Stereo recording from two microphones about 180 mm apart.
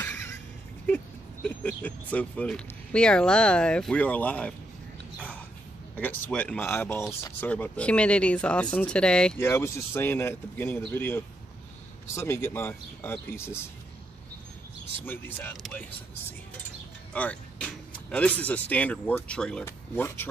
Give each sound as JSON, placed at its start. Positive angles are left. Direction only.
{"t": 0.0, "sound": "a sound", "side_deg": 10}
{"t": 0.8, "sound": "speech", "side_deg": 10}
{"t": 5.9, "sound": "speech", "side_deg": 10}
{"t": 15.0, "sound": "speech", "side_deg": 10}
{"t": 17.1, "sound": "speech", "side_deg": 5}